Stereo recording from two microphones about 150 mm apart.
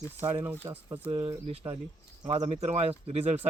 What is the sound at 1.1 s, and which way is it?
Speech, 35° right (ahead or behind).